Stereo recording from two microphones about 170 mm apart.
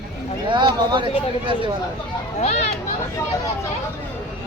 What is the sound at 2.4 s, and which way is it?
Speech, 40° left (ahead or behind).